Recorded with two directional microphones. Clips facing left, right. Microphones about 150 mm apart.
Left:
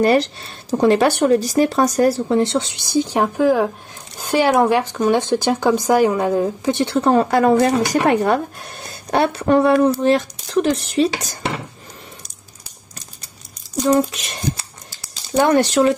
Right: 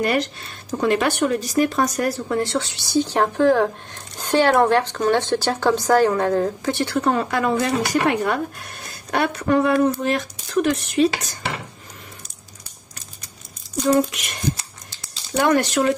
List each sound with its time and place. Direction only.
0.0 s speech: 30° left (ahead or behind)
15.3 s speech: 30° left (ahead or behind)